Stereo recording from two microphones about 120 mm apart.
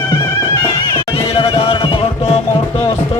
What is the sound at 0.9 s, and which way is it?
Music, 50° left (ahead or behind).